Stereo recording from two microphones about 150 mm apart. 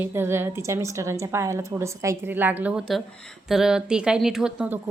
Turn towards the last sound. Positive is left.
turn(degrees=-10)  # may be behind; listen again after turning